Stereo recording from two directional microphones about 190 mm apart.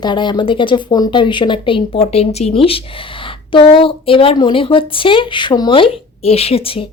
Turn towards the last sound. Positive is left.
turn(degrees=30)  # may be behind; listen again after turning